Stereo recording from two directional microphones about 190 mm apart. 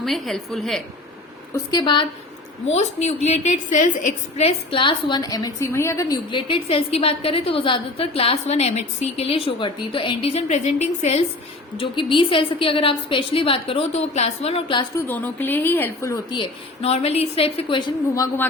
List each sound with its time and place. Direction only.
0.0 s a woman's voice: centre (ahead or behind)
1.5 s a woman's voice: 25° left (ahead or behind)
2.7 s a woman's voice: 35° left (ahead or behind)
15.0 s a woman's voice: 10° left (ahead or behind)